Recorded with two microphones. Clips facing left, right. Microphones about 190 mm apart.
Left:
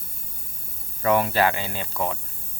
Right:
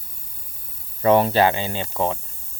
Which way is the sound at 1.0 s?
30° right (ahead or behind).